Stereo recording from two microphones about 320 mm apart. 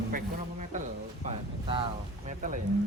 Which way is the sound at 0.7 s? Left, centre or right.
Right.